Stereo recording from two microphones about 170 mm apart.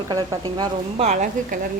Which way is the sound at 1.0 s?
50° right (ahead or behind).